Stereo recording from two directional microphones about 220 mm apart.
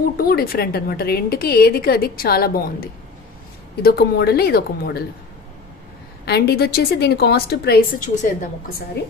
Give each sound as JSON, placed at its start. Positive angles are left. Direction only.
{"t": 0.2, "sound": "a woman's voice", "side_deg": 40}
{"t": 6.2, "sound": "a woman's voice", "side_deg": 50}